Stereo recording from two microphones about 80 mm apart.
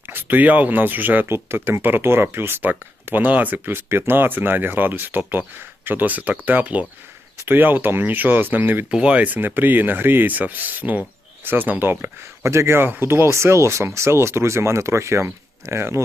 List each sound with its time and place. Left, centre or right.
0.1 s speech: right
8.9 s speech: centre; by 16.0 s right